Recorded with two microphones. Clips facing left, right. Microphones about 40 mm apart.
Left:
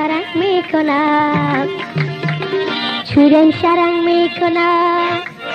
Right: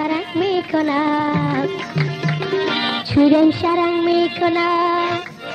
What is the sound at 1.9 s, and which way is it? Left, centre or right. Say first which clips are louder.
Music: left 2 dB; left.